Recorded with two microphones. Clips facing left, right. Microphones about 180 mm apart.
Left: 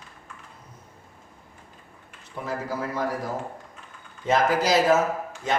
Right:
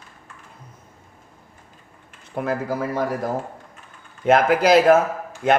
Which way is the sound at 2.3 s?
60° right (ahead or behind).